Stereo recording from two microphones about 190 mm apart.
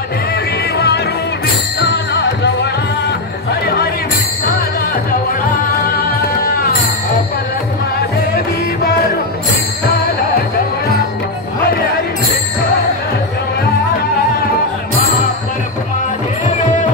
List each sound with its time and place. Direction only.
0.7 s music: 60° left (ahead or behind)